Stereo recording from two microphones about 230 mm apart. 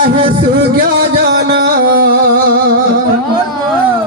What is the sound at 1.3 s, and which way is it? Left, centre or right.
Music, right.